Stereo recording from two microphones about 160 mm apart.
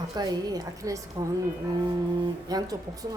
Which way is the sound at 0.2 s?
25° right (ahead or behind).